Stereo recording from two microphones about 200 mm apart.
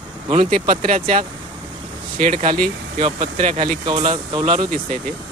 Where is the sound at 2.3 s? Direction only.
25° right (ahead or behind).